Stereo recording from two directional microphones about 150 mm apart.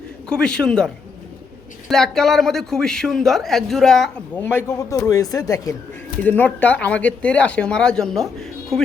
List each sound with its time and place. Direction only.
0.3 s speech: 5° left (ahead or behind)
1.9 s speech: centre (ahead or behind)
4.4 s a man's voice: 15° left (ahead or behind)
6.2 s speech: 10° left (ahead or behind)